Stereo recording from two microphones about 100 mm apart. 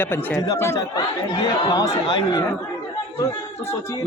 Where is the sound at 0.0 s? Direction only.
20° left (ahead or behind).